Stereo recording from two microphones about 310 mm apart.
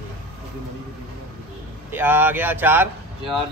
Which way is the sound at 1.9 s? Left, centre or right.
Centre.